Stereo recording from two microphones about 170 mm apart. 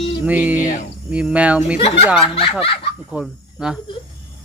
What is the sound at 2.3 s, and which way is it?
Speech, 35° left (ahead or behind).